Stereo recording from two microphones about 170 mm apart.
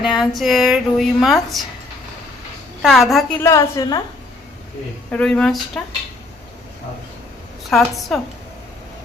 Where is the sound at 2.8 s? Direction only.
Centre (ahead or behind).